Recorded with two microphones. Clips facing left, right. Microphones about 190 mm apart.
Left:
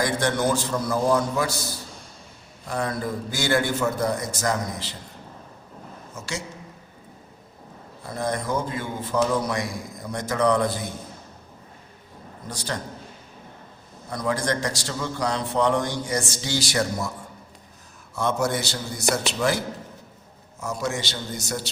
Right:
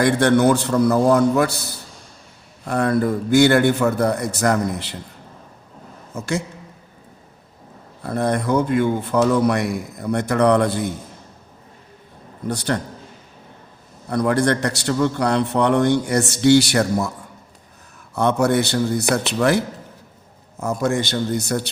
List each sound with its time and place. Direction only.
0.0 s a man's voice: 65° right (ahead or behind)
6.1 s a man's voice: 55° right (ahead or behind)
8.0 s a man's voice: 60° right (ahead or behind)
12.5 s a man's voice: 65° right (ahead or behind)
14.1 s a man's voice: 60° right (ahead or behind)
18.1 s a man's voice: 60° right (ahead or behind)